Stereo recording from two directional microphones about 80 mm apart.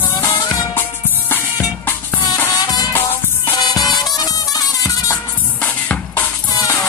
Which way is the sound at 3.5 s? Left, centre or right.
Left.